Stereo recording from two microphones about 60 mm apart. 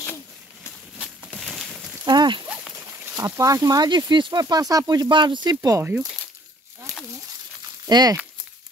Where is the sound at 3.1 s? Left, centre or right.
Right.